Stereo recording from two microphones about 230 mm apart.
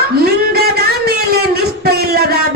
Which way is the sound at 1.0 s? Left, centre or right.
Right.